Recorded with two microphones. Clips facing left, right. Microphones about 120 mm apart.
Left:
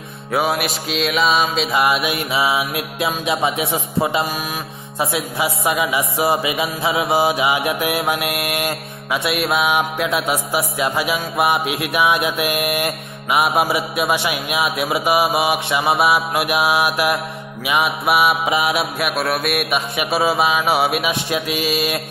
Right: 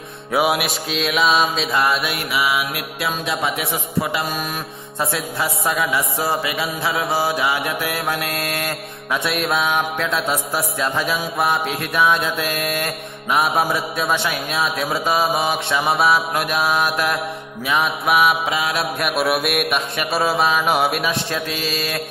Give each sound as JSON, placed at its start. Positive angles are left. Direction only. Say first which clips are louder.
{"t": 0.3, "sound": "mantra", "louder": "right 1 dB", "side_deg": 0}
{"t": 2.0, "sound": "music", "louder": "left 2 dB", "side_deg": 25}
{"t": 4.9, "sound": "mantra", "louder": "left 2 dB", "side_deg": 5}
{"t": 5.7, "sound": "music", "louder": "even", "side_deg": 20}
{"t": 8.3, "sound": "mantra", "louder": "left 2 dB", "side_deg": 20}
{"t": 9.2, "sound": "mantra", "louder": "left 2 dB", "side_deg": 0}
{"t": 12.6, "sound": "music", "louder": "left 3 dB", "side_deg": 25}
{"t": 13.3, "sound": "mantra", "louder": "left 1 dB", "side_deg": 5}
{"t": 18.5, "sound": "music", "louder": "left 3 dB", "side_deg": 25}
{"t": 18.8, "sound": "mantra", "louder": "even", "side_deg": 0}
{"t": 21.3, "sound": "mantra", "louder": "left 4 dB", "side_deg": 10}
{"t": 21.7, "sound": "music", "louder": "left 3 dB", "side_deg": 25}